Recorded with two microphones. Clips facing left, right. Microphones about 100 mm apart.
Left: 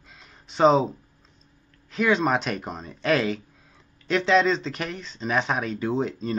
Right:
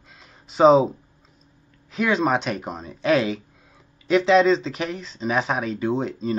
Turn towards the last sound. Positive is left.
turn(degrees=0)  # may be behind; listen again after turning